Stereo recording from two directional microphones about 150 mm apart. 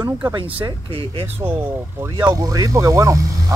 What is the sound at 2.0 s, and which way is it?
Speech, 20° right (ahead or behind).